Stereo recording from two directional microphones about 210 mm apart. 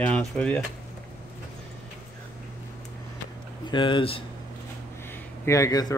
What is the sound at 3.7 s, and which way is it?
Speech, 25° left (ahead or behind).